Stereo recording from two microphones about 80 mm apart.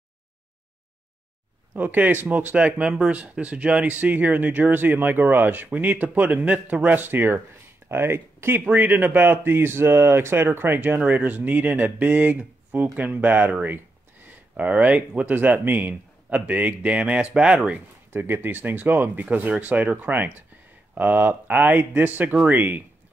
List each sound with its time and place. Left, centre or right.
1.7 s speech: right